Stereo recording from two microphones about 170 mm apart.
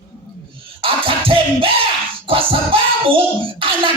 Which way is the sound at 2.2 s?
30° right (ahead or behind).